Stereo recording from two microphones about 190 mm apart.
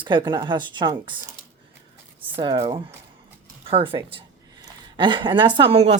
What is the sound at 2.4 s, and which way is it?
A woman's voice, 25° right (ahead or behind).